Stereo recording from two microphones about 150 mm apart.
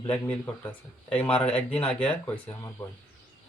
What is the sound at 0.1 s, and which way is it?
Speech, 10° left (ahead or behind).